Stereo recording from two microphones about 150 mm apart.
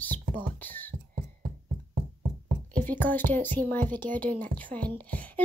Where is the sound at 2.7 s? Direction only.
10° left (ahead or behind).